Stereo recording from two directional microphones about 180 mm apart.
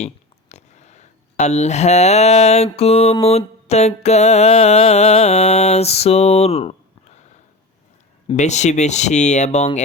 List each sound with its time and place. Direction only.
0.0 s a sound: 40° left (ahead or behind)
2.6 s music: 35° left (ahead or behind)
8.3 s music: 40° left (ahead or behind)